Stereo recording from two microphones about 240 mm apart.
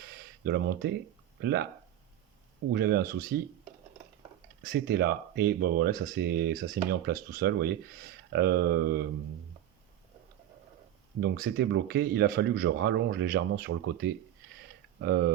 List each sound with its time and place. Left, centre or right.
0.0 s a sound: right
1.4 s speech: right
2.7 s speech: right
4.9 s speech: right
11.2 s speech: right